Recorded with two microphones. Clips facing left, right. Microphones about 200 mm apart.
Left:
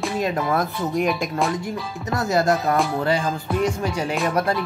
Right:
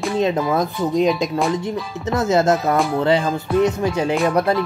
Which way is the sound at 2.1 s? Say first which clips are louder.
Right 3 dB; 20° right (ahead or behind).